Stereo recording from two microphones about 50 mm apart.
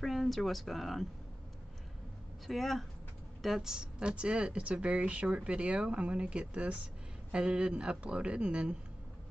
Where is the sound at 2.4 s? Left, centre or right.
Centre.